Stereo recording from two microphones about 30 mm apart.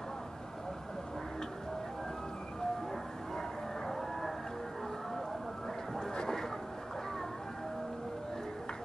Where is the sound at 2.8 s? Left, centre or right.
Centre.